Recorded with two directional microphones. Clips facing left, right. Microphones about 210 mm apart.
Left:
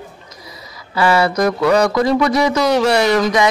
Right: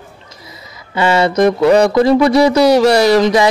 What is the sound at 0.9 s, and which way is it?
Speech, 25° right (ahead or behind).